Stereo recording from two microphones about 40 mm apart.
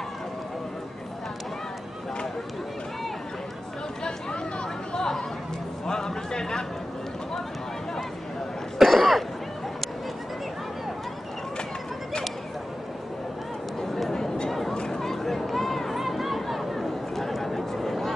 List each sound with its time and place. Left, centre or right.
4.0 s chatter: left
5.9 s a sound: centre
8.7 s cough: centre
13.7 s chatter: centre
14.1 s chatter: centre
14.7 s a sound: centre